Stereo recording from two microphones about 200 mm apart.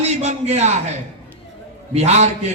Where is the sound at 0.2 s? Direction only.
35° right (ahead or behind).